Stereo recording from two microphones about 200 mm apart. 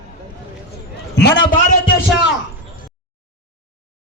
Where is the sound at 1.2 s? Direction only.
50° left (ahead or behind).